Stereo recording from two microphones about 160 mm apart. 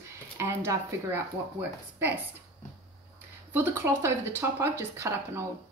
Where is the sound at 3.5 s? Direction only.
15° right (ahead or behind).